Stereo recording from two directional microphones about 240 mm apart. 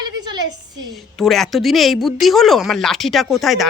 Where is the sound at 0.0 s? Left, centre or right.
Centre.